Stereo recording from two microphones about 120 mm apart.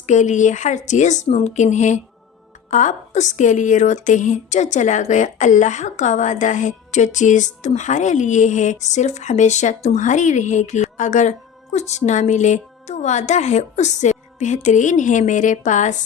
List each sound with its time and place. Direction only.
0.0 s a woman's voice: 90° left
1.4 s a sound: 70° left (ahead or behind)
2.6 s a woman's voice: 90° left